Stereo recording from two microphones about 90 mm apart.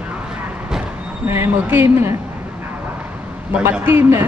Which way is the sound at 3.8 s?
25° right (ahead or behind).